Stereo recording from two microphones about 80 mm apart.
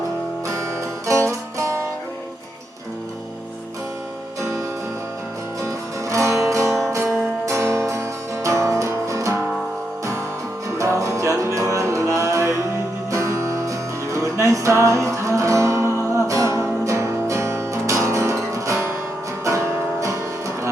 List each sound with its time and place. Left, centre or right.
0.4 s music: right
4.4 s music: right
5.6 s music: right
10.8 s music: right